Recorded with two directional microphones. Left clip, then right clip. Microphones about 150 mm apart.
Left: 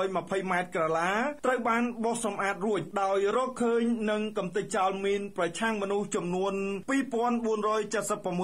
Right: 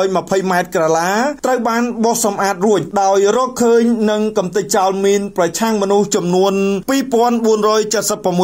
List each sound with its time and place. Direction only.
0.0 s speech: 40° right (ahead or behind)